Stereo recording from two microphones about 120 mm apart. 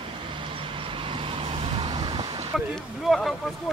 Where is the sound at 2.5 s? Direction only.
Centre (ahead or behind).